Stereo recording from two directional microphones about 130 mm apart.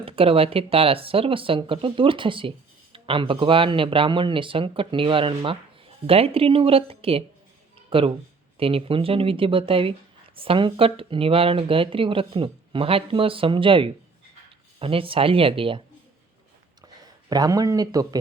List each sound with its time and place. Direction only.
0.0 s speech: 45° right (ahead or behind)
16.8 s speech: 30° right (ahead or behind)